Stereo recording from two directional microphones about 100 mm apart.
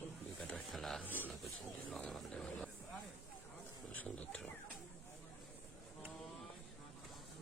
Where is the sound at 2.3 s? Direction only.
10° left (ahead or behind).